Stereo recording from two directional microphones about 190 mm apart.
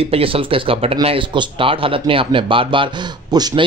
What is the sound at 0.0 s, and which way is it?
Speech, 30° right (ahead or behind).